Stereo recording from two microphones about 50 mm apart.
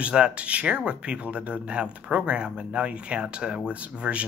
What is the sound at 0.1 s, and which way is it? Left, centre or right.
Speech, right.